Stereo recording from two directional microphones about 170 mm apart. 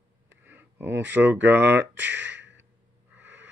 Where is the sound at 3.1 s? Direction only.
10° right (ahead or behind).